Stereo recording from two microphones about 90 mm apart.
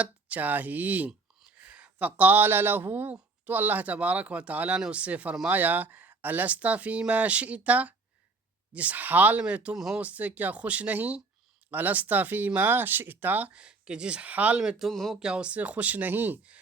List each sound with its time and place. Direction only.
0.0 s speech: 15° right (ahead or behind)
10.0 s speech: 15° right (ahead or behind)
14.6 s speech: 5° right (ahead or behind); by 16.6 s 20° right (ahead or behind)